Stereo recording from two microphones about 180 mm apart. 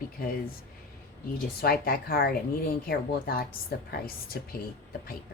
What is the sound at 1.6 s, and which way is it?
Speech, 55° left (ahead or behind).